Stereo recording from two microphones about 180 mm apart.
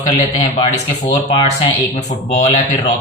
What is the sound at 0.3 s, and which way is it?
Speech, 35° left (ahead or behind).